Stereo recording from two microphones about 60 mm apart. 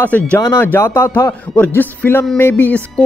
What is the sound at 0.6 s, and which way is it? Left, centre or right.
Speech, left.